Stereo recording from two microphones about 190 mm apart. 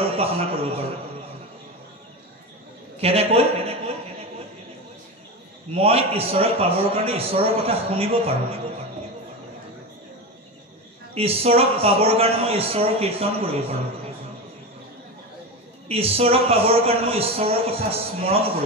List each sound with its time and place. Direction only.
0.2 s a man's voice: 30° right (ahead or behind)
3.0 s a man's voice: 30° right (ahead or behind)
5.8 s a man's voice: 30° right (ahead or behind)
11.1 s a man's voice: 30° right (ahead or behind)
15.9 s a man's voice: 30° right (ahead or behind)